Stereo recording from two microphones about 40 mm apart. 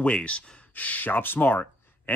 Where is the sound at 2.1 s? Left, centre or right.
Left.